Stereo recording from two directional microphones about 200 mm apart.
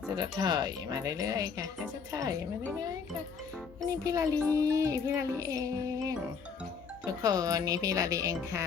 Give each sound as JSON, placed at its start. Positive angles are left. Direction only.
{"t": 0.2, "sound": "music", "side_deg": -20}
{"t": 4.0, "sound": "music", "side_deg": -15}